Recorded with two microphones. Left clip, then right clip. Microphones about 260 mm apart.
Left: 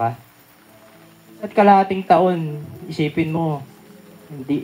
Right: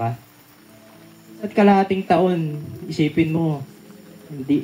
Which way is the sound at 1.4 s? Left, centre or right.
Left.